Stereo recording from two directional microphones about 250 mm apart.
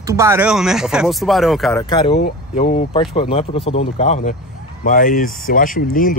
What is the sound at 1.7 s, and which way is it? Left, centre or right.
Speech, centre.